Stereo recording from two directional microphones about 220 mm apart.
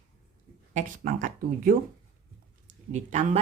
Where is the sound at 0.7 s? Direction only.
35° right (ahead or behind).